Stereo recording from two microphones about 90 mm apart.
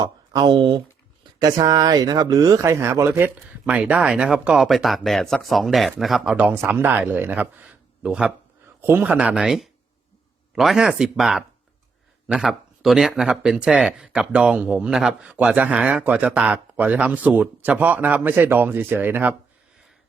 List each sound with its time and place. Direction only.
0.0 s speech: 50° right (ahead or behind); by 3.1 s 30° right (ahead or behind)
3.2 s speech: 15° right (ahead or behind)
6.4 s speech: 20° right (ahead or behind)
8.8 s speech: 25° right (ahead or behind)
9.1 s speech: 15° right (ahead or behind)